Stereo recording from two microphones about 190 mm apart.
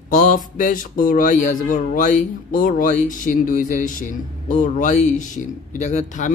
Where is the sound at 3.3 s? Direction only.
45° left (ahead or behind).